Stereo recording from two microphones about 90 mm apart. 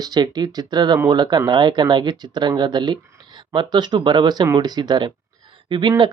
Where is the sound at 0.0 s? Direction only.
50° right (ahead or behind).